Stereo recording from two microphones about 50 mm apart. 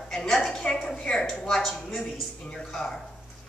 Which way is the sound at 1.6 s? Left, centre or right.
Centre.